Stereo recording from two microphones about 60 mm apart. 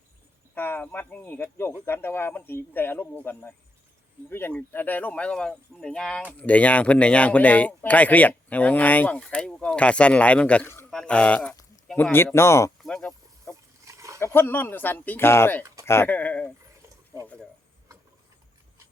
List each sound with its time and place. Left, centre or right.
0.5 s speech: left
1.4 s speech: left
4.3 s speech: left; by 6.2 s centre
6.4 s speech: left
12.1 s speech: left
12.9 s speech: centre
13.8 s a sound: right
14.2 s speech: left
15.3 s speech: left
16.0 s speech: left